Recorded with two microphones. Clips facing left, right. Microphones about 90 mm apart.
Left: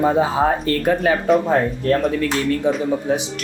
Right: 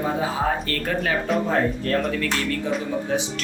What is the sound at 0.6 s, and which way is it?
Speech, 25° left (ahead or behind).